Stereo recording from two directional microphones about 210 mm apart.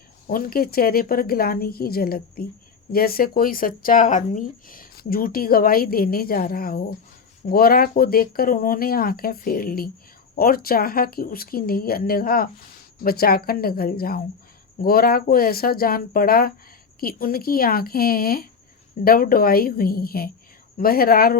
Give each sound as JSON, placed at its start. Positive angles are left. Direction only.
{"t": 0.3, "sound": "speech", "side_deg": 45}